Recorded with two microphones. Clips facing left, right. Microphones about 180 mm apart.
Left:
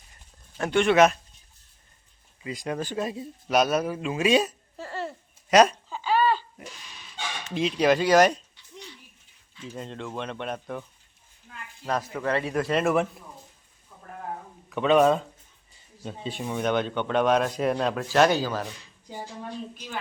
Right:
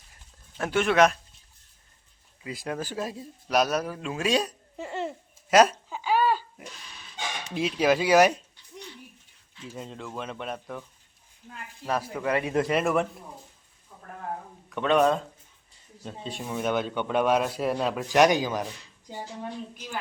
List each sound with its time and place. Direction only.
0.1 s a sound: centre (ahead or behind)
2.4 s a man's voice: centre (ahead or behind)
4.8 s a sound: 20° right (ahead or behind)
5.5 s a sound: 5° right (ahead or behind)
7.5 s speech: 5° right (ahead or behind)
9.7 s a man's voice: 5° right (ahead or behind)
11.9 s speech: 10° right (ahead or behind)
12.7 s a man's voice: centre (ahead or behind)
14.7 s a man's voice: centre (ahead or behind)
18.1 s speech: 15° right (ahead or behind)